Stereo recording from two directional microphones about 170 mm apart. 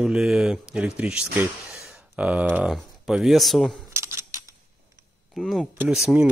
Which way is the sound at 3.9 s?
15° right (ahead or behind).